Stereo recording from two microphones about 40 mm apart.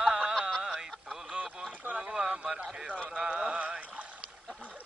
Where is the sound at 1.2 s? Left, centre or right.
Right.